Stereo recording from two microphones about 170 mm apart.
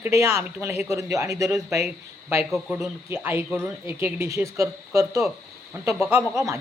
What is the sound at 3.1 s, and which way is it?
Speech, 15° right (ahead or behind).